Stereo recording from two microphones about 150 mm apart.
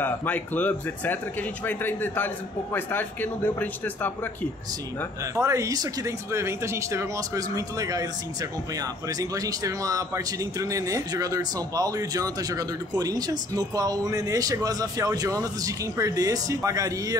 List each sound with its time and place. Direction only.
0.0 s speech: 10° left (ahead or behind)
5.2 s speech: 20° right (ahead or behind)